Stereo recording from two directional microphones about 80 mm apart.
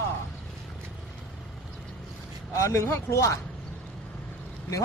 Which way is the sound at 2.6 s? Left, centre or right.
Left.